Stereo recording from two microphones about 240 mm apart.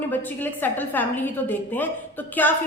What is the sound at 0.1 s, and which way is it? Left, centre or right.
A woman's voice, centre.